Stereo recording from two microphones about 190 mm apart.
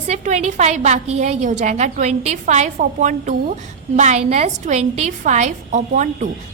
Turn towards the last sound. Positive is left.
turn(degrees=-40)  # may be behind; listen again after turning